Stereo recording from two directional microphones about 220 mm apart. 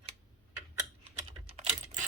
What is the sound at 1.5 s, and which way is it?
Typing, 30° right (ahead or behind).